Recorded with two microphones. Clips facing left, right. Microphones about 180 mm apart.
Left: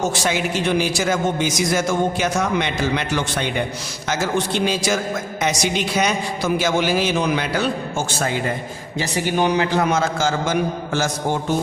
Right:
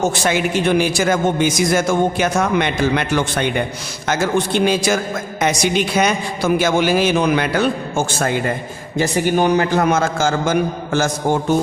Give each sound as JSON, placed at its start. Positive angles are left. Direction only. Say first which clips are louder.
{"t": 0.0, "sound": "a man's voice", "louder": "right 3 dB", "side_deg": -55}